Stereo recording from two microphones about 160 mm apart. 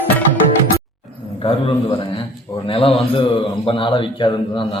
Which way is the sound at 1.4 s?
35° left (ahead or behind).